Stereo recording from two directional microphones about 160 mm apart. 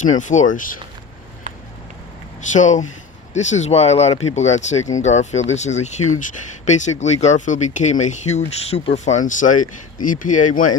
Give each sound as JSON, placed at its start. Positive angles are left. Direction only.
{"t": 0.0, "sound": "speech", "side_deg": 50}
{"t": 2.5, "sound": "speech", "side_deg": 50}